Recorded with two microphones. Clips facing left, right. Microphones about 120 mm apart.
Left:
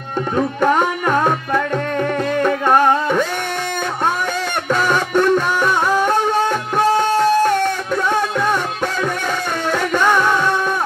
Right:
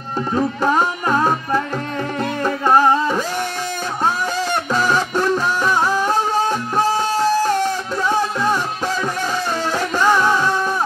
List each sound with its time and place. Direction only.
2.4 s music: 60° left (ahead or behind)
4.7 s music: 60° left (ahead or behind)
9.8 s music: 60° left (ahead or behind)